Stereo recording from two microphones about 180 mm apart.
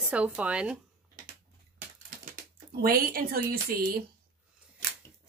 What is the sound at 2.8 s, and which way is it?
Speech, 55° right (ahead or behind).